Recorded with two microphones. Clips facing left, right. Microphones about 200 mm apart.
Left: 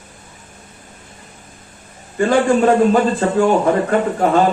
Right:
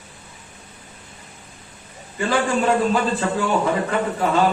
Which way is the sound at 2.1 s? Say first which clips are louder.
Left 7 dB; 50° left (ahead or behind).